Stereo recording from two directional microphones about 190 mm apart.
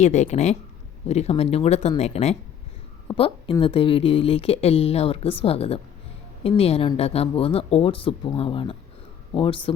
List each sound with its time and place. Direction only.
0.0 s speech: 40° left (ahead or behind)